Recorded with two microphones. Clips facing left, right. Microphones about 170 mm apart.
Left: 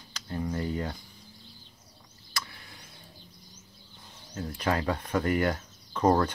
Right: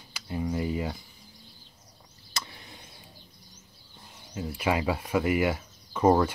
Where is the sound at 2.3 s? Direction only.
20° right (ahead or behind).